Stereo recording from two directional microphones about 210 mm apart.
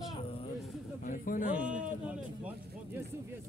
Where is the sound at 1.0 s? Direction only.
40° left (ahead or behind).